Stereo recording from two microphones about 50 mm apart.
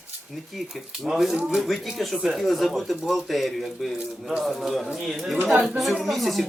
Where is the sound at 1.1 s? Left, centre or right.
Centre.